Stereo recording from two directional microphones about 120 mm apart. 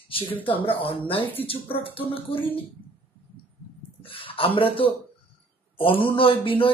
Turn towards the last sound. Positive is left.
turn(degrees=45)  # may be behind; listen again after turning